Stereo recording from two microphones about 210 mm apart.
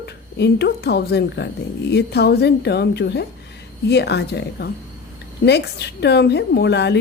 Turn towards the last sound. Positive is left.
turn(degrees=55)  # may be behind; listen again after turning